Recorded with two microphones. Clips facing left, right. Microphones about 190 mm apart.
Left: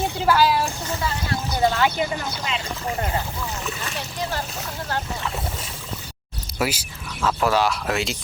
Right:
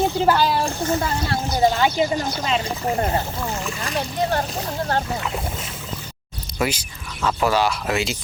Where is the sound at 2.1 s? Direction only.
45° right (ahead or behind).